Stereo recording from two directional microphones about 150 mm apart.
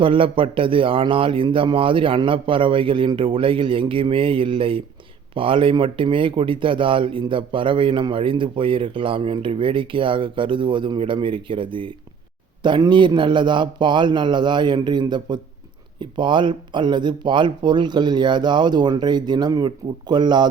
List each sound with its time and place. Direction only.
0.0 s speech: 35° right (ahead or behind)